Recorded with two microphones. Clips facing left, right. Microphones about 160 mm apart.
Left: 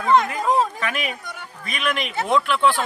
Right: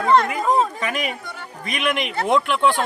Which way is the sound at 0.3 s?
5° right (ahead or behind).